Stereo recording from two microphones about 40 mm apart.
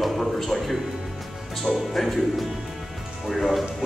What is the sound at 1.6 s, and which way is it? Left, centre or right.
Speech, centre.